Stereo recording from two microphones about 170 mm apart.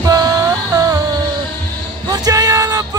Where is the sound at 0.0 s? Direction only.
20° right (ahead or behind).